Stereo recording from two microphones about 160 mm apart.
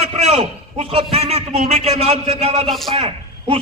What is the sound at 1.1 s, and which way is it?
A man's voice, 40° right (ahead or behind).